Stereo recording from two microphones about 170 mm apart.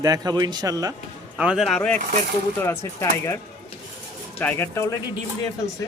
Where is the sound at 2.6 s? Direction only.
15° left (ahead or behind).